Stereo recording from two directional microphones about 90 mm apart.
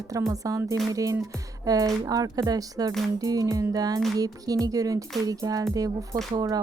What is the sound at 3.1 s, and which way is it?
Music, 45° right (ahead or behind).